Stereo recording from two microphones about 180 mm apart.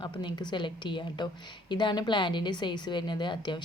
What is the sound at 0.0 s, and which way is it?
A woman's voice, 25° left (ahead or behind).